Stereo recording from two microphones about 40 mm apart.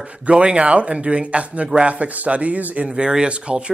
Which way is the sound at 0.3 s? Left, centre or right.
Right.